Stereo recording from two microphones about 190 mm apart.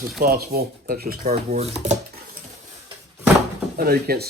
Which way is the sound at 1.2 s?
35° right (ahead or behind).